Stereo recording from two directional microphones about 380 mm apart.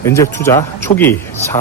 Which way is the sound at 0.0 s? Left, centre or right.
Centre.